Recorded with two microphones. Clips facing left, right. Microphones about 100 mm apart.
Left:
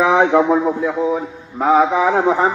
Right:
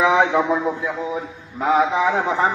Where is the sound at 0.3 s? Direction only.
40° left (ahead or behind).